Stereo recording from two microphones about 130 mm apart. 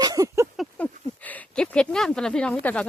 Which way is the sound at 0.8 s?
10° left (ahead or behind).